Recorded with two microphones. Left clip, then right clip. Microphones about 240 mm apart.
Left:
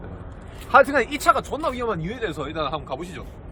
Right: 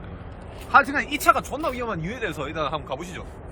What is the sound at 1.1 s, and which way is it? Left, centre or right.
Speech, centre.